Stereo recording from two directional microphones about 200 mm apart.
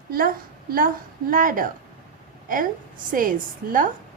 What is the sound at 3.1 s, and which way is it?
Speech, 45° right (ahead or behind).